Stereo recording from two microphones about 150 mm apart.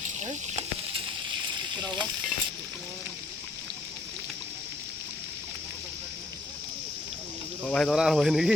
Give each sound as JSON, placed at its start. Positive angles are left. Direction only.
{"t": 0.2, "sound": "a sound", "side_deg": -50}
{"t": 1.7, "sound": "speech", "side_deg": -30}
{"t": 7.7, "sound": "speech", "side_deg": 5}